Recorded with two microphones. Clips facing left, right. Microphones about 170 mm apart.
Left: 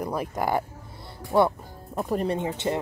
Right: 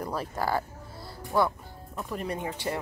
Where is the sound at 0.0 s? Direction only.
15° left (ahead or behind).